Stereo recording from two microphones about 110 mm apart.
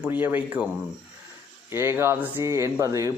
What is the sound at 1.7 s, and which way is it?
Speech, 20° right (ahead or behind).